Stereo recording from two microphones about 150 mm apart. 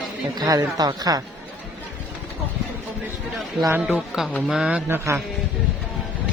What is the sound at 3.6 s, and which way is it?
Speech, 15° right (ahead or behind).